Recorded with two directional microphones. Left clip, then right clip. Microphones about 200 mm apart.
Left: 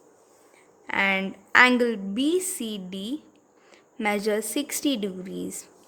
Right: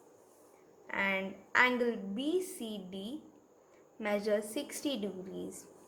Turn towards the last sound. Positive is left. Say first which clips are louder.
# left 8 dB
turn(degrees=45)  # may be behind; listen again after turning